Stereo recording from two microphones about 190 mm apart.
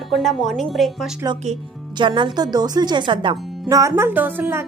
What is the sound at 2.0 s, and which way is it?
Speech, 25° right (ahead or behind).